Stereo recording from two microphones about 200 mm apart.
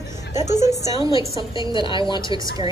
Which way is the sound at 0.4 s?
35° left (ahead or behind).